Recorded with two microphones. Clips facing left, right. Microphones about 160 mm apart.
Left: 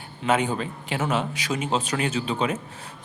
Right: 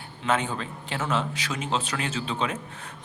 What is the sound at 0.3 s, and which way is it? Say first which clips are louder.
Speech: left 3 dB; 10° left (ahead or behind).